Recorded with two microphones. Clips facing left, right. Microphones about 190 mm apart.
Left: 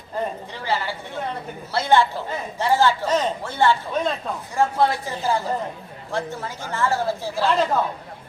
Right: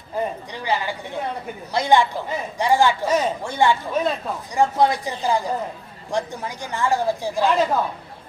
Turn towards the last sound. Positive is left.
turn(degrees=-10)  # may be behind; listen again after turning